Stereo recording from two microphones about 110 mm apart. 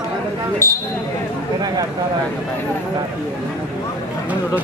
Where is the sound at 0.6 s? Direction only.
25° left (ahead or behind).